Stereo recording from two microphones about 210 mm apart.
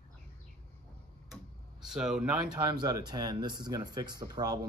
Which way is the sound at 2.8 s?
20° right (ahead or behind).